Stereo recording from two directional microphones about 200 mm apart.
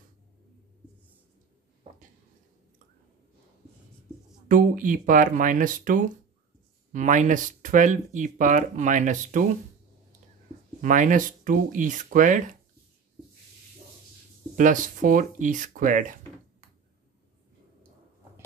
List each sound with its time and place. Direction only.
4.5 s speech: 40° right (ahead or behind)
10.8 s speech: 40° right (ahead or behind)
14.5 s speech: 40° right (ahead or behind)